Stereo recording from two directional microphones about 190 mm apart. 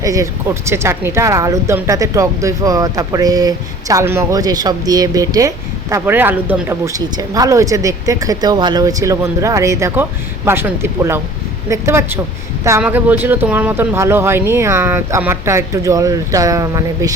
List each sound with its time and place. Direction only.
0.0 s speech: 15° right (ahead or behind)